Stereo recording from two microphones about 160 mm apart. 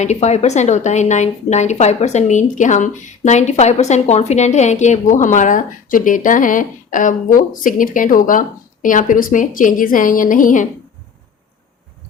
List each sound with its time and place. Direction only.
0.0 s a woman's voice: 45° left (ahead or behind)